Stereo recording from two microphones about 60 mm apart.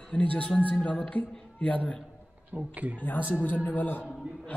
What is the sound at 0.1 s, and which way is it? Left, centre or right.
A man's voice, left.